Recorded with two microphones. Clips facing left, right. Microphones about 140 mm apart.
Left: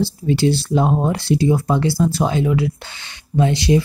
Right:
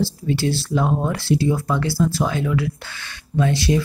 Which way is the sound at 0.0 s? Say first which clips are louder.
Left 4 dB; 20° left (ahead or behind).